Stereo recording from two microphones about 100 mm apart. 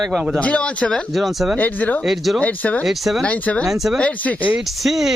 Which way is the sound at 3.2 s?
15° left (ahead or behind).